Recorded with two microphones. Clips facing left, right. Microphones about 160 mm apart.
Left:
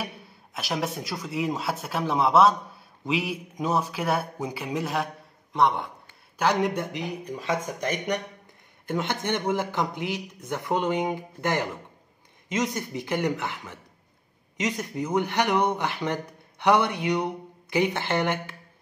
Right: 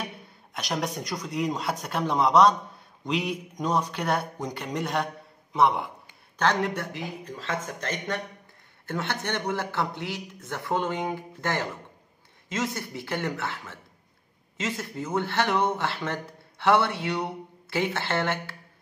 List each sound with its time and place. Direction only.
0.0 s speech: 5° left (ahead or behind)
6.3 s speech: 10° left (ahead or behind)